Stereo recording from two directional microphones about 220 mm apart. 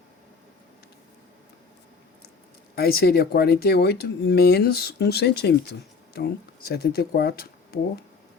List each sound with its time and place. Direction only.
2.7 s speech: 45° left (ahead or behind)